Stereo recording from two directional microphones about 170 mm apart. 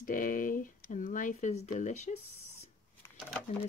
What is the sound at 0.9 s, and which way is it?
Speech, 50° left (ahead or behind).